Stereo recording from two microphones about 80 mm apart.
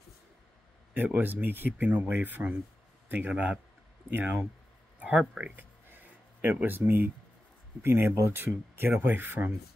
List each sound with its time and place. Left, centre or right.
0.9 s speech: right
4.9 s a sound: centre
6.6 s speech: right